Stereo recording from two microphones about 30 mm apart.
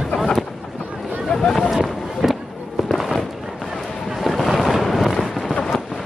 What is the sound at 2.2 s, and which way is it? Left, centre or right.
Fireworks, centre.